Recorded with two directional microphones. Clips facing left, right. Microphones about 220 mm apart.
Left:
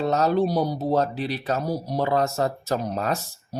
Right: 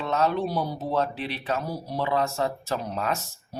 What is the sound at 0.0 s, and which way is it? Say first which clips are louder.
Speech: left 4 dB; 40° left (ahead or behind).